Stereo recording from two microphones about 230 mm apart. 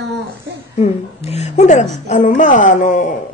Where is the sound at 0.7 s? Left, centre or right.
Left.